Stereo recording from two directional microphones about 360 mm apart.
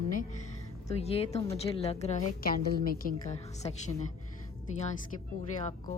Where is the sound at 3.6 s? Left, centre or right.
Centre.